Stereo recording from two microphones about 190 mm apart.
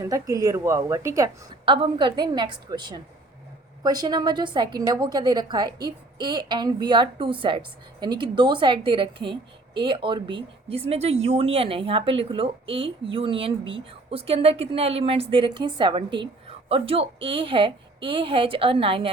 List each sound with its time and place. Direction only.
0.0 s speech: 15° right (ahead or behind)